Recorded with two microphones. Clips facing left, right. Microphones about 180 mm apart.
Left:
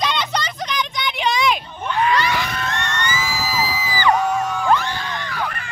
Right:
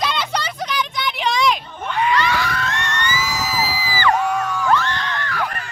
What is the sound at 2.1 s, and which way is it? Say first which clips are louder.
Screaming: right 1 dB; 15° left (ahead or behind).